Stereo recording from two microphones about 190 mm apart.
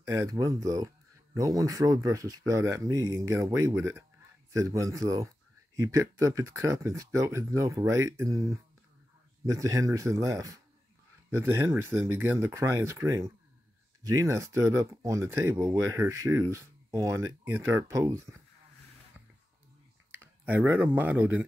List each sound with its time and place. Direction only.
0.0 s speech: 15° right (ahead or behind)
20.2 s speech: 10° right (ahead or behind)